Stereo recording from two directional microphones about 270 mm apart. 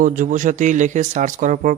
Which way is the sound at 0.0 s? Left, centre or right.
Right.